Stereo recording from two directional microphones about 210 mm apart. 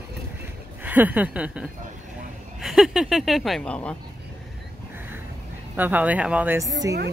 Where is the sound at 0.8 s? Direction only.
10° right (ahead or behind).